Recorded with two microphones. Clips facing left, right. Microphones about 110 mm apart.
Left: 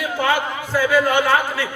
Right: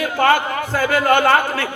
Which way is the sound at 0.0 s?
60° right (ahead or behind).